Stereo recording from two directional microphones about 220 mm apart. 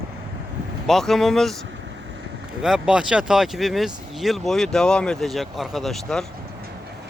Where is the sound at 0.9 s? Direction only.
Centre (ahead or behind).